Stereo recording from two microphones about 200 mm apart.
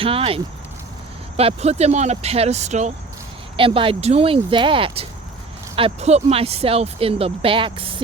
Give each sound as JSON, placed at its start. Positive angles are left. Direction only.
{"t": 0.0, "sound": "speech", "side_deg": -30}